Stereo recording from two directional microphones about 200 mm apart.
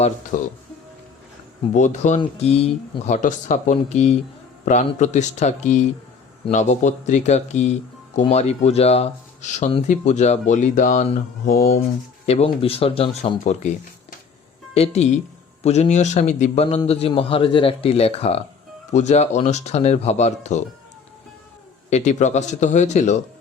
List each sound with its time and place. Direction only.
0.3 s speech: 40° left (ahead or behind)
1.7 s speech: 35° left (ahead or behind)
11.8 s speech: 30° left (ahead or behind)
14.8 s a man's voice: 35° left (ahead or behind)
21.8 s speech: 35° left (ahead or behind)